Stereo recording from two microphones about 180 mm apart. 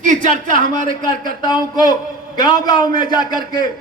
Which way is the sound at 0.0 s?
45° right (ahead or behind).